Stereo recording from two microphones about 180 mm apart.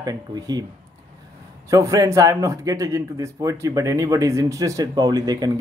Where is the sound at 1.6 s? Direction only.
15° right (ahead or behind).